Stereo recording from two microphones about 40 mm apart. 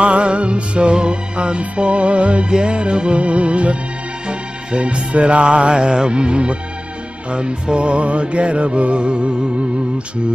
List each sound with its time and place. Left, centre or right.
0.0 s music: right